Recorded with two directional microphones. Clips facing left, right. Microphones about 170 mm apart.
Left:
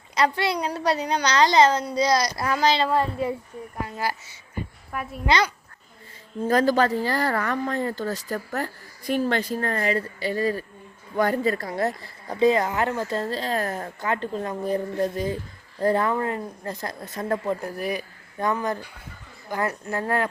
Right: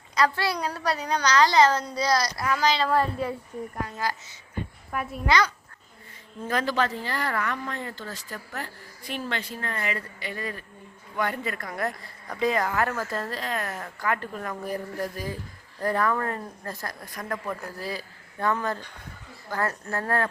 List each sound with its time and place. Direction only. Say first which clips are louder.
0.2 s a woman's voice: left 2 dB; 20° left (ahead or behind)
2.4 s a woman's voice: left 2 dB; 30° left (ahead or behind)
6.5 s a woman's voice: left 6 dB; 40° left (ahead or behind); by 20.2 s 15° left (ahead or behind)